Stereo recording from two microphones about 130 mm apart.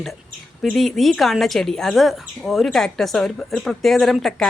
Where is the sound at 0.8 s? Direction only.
Centre (ahead or behind).